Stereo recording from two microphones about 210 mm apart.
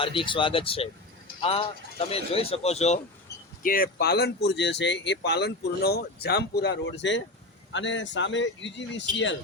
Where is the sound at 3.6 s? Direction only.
45° left (ahead or behind).